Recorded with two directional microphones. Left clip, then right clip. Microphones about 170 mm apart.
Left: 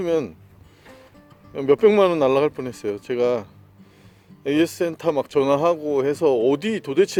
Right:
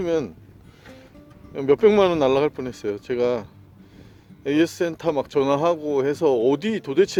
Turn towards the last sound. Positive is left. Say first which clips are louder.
# even
turn(degrees=0)  # may be behind; listen again after turning